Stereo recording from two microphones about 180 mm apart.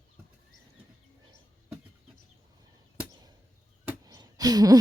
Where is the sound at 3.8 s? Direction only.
20° right (ahead or behind).